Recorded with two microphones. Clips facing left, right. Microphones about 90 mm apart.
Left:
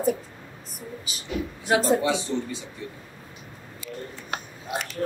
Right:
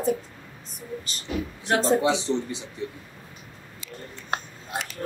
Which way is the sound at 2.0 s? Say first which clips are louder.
Right 2 dB; 20° right (ahead or behind).